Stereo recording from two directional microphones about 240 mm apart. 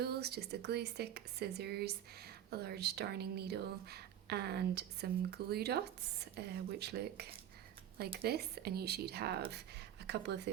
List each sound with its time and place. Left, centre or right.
0.0 s speech: right